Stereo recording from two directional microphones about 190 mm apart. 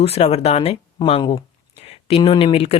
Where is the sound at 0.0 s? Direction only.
35° left (ahead or behind).